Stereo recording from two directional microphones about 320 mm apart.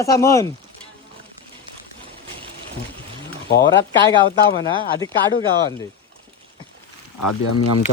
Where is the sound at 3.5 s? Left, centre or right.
Left.